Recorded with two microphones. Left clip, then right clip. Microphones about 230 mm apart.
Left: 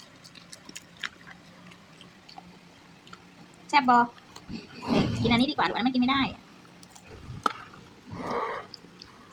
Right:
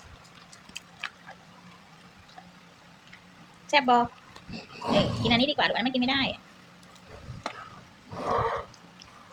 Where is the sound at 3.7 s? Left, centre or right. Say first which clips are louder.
Left 1 dB; centre.